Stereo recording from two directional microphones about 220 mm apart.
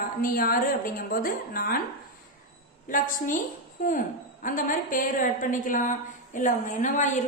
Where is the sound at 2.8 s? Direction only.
40° left (ahead or behind).